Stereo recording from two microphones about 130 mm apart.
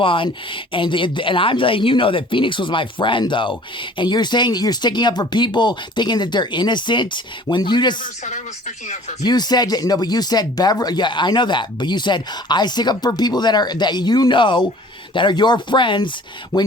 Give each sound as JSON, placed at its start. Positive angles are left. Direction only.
{"t": 0.0, "sound": "speech", "side_deg": 40}
{"t": 8.0, "sound": "speech", "side_deg": 70}
{"t": 9.2, "sound": "speech", "side_deg": 30}